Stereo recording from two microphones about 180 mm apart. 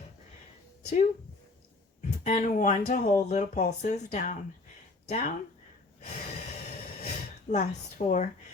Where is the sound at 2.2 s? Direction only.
45° left (ahead or behind).